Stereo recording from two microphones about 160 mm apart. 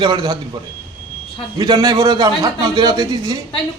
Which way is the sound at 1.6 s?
25° right (ahead or behind).